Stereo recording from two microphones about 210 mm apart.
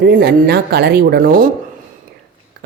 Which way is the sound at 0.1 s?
50° right (ahead or behind).